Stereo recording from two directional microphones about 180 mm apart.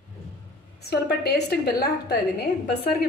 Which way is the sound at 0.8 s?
65° left (ahead or behind).